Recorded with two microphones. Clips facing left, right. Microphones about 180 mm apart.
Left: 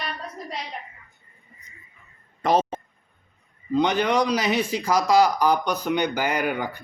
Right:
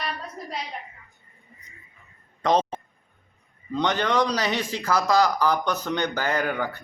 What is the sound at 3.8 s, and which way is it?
Speech, 10° left (ahead or behind).